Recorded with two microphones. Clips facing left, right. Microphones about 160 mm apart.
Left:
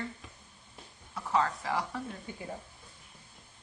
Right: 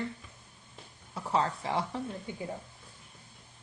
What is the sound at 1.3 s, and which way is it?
Speech, 30° right (ahead or behind).